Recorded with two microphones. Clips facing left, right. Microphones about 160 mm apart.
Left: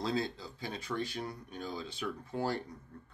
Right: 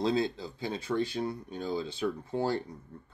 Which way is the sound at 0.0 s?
25° right (ahead or behind).